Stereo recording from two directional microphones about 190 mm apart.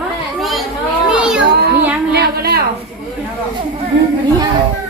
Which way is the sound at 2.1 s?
55° right (ahead or behind).